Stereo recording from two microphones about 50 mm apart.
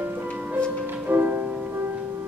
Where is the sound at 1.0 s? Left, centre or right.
Right.